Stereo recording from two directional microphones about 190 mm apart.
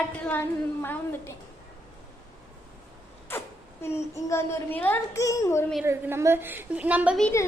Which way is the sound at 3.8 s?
15° left (ahead or behind).